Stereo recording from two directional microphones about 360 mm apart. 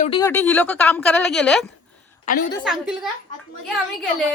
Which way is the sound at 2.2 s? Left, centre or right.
Left.